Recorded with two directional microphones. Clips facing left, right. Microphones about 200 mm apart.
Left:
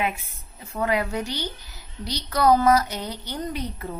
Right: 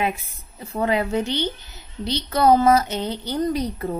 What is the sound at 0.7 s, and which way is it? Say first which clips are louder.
A woman's voice: right 3 dB; 30° right (ahead or behind).